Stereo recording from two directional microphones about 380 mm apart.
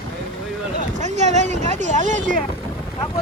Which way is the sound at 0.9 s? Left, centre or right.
Centre.